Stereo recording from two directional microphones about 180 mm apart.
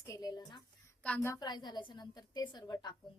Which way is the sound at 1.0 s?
10° left (ahead or behind).